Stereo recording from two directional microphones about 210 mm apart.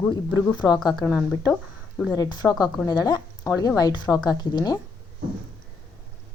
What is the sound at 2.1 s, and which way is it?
Speech, 15° left (ahead or behind).